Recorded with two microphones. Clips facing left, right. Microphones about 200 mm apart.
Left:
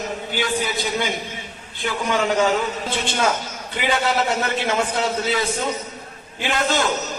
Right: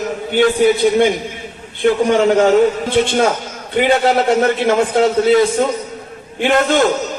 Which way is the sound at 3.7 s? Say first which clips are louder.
Right 8 dB; 55° right (ahead or behind).